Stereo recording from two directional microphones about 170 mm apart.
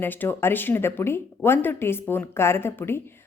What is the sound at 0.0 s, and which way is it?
Speech, 10° left (ahead or behind).